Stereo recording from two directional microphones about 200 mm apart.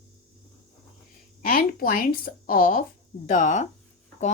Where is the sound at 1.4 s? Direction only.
45° left (ahead or behind).